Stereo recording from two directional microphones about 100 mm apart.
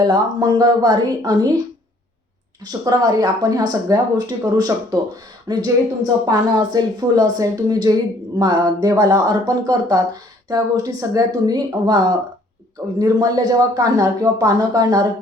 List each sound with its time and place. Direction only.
0.4 s speech: 40° right (ahead or behind)
2.6 s speech: 40° right (ahead or behind)